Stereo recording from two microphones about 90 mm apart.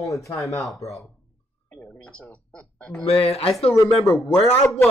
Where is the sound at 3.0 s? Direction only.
90° left.